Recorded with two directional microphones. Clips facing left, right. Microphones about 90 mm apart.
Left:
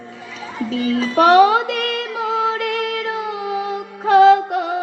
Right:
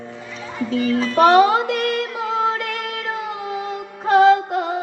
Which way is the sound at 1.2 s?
35° right (ahead or behind).